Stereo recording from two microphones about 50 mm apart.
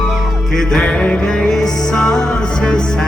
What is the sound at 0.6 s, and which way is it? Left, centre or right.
Music, centre.